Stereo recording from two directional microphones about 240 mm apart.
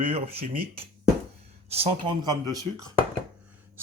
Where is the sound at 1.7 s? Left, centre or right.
Right.